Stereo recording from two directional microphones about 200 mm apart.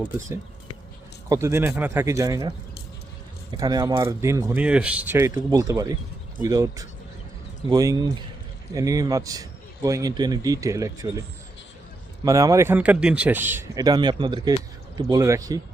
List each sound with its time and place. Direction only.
1.3 s a man's voice: 15° right (ahead or behind)
3.6 s a man's voice: 20° right (ahead or behind)
12.2 s a man's voice: 15° right (ahead or behind)